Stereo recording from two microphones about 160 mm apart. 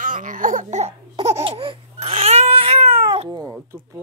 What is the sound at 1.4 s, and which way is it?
Baby cry, 35° right (ahead or behind).